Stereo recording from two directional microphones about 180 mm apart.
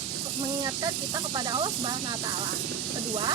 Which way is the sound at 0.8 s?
20° right (ahead or behind).